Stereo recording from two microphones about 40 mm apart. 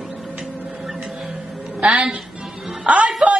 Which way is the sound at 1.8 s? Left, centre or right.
Right.